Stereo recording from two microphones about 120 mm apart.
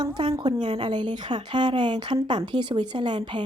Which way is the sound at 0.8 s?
40° right (ahead or behind).